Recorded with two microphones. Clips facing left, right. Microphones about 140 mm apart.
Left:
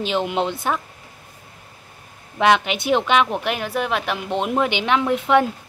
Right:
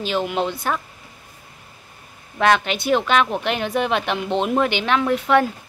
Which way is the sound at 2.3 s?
15° left (ahead or behind).